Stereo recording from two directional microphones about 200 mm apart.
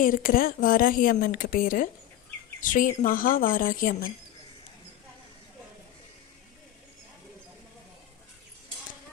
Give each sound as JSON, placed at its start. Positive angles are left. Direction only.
{"t": 0.0, "sound": "speech", "side_deg": 45}